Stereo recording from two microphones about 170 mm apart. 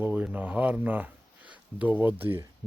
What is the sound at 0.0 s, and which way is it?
Speech, 10° right (ahead or behind).